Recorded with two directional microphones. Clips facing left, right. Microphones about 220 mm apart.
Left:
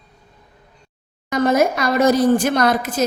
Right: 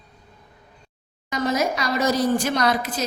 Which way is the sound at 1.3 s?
55° left (ahead or behind).